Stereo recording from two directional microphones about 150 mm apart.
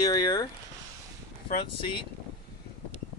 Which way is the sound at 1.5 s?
35° left (ahead or behind).